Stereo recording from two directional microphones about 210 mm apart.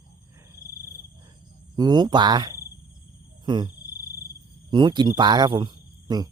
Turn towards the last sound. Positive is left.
turn(degrees=-20)  # may be behind; listen again after turning